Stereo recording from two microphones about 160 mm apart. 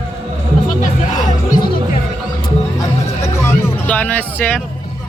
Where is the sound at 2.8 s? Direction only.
15° left (ahead or behind).